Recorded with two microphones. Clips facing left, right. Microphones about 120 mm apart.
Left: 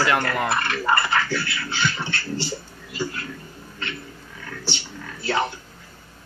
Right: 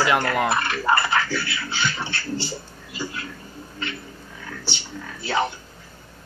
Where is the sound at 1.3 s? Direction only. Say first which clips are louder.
Even; centre (ahead or behind).